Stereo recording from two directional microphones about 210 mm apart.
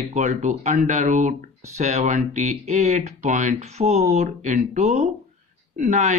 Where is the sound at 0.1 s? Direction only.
35° right (ahead or behind).